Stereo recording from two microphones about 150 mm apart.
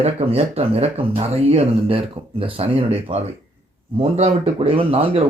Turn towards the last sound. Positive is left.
turn(degrees=-40)  # may be behind; listen again after turning